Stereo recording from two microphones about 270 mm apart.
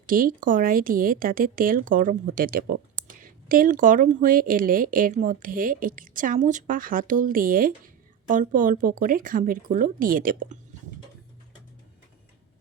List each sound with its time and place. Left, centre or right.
0.0 s speech: right